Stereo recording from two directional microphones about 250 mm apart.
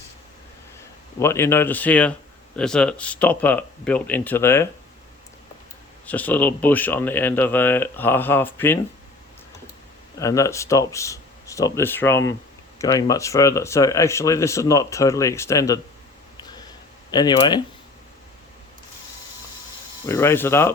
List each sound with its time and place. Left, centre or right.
1.2 s speech: centre
6.1 s speech: centre
10.2 s speech: centre
17.1 s speech: centre
20.1 s speech: centre